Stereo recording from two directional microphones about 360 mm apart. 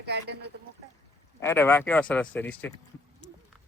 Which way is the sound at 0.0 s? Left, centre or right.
Right.